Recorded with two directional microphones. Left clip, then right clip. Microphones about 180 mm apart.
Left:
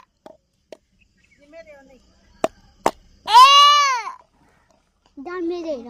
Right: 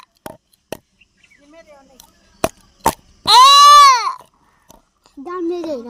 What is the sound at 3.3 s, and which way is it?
Baby cry, 5° right (ahead or behind).